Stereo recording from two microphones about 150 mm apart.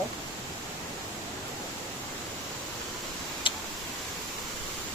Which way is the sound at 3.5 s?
35° left (ahead or behind).